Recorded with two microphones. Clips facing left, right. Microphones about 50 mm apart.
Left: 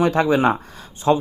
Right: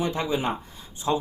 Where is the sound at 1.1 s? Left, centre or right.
Left.